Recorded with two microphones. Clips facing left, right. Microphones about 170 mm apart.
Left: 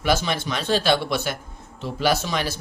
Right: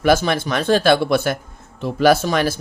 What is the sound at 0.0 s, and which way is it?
Speech, 50° right (ahead or behind).